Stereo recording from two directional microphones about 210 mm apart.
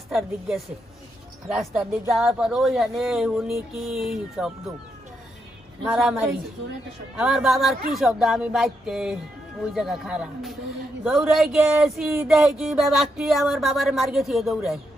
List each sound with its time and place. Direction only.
1.5 s speech: centre (ahead or behind)
5.9 s speech: centre (ahead or behind)